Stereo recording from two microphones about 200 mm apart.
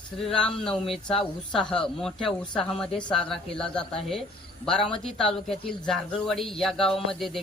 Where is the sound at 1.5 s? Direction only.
5° left (ahead or behind).